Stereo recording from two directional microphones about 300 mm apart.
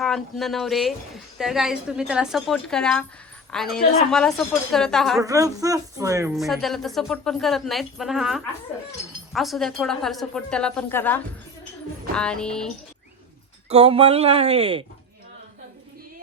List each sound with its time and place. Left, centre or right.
0.0 s a woman's voice: centre
5.2 s a woman's voice: centre
13.7 s speech: centre